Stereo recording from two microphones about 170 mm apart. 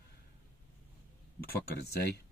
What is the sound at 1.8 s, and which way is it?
Speech, 70° left (ahead or behind).